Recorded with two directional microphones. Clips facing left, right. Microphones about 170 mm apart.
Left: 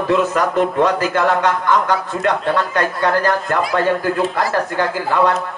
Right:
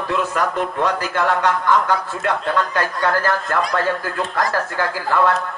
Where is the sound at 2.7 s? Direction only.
20° left (ahead or behind).